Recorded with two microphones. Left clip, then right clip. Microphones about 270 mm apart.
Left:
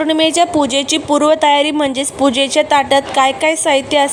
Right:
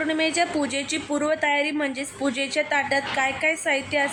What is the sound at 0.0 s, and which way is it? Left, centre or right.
Speech, left.